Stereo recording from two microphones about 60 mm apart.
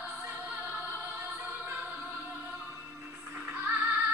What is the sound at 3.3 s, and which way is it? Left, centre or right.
Music, right.